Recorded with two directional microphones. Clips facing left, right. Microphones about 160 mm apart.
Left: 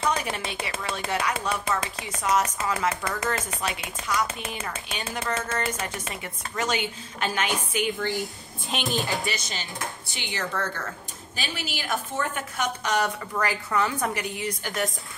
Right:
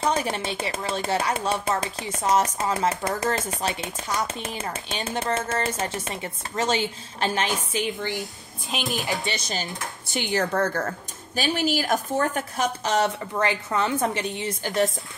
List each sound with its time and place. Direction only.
0.0 s speech: 25° right (ahead or behind)
8.2 s a woman's voice: centre (ahead or behind)
9.3 s speech: 25° right (ahead or behind)
10.0 s speech: centre (ahead or behind)
10.3 s a woman's voice: 40° right (ahead or behind)